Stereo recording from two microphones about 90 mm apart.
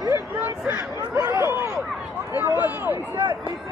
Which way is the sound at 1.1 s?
40° right (ahead or behind).